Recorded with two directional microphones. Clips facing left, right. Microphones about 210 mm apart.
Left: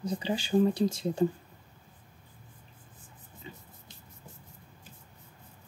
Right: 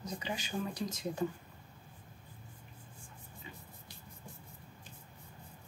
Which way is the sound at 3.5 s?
30° left (ahead or behind).